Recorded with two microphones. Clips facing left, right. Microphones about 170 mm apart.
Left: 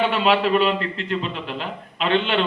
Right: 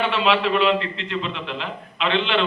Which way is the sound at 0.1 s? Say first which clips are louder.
Left 2 dB; 45° left (ahead or behind).